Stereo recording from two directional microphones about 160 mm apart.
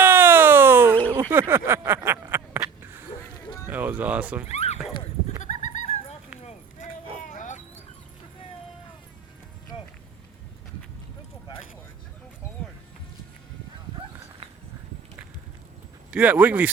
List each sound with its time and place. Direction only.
0.0 s a sound: 15° right (ahead or behind)
3.7 s dog: 10° right (ahead or behind)
4.4 s neigh: 40° left (ahead or behind)
5.4 s horse: 50° left (ahead or behind)
7.3 s dog: 50° left (ahead or behind)
16.1 s speech: 10° right (ahead or behind)